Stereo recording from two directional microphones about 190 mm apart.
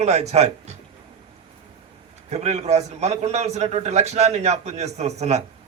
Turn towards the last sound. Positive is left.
turn(degrees=-35)  # may be behind; listen again after turning